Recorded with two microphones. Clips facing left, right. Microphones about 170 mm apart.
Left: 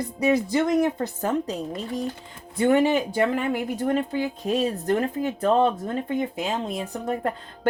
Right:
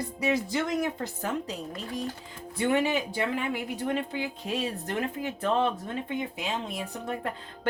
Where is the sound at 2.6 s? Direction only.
45° left (ahead or behind).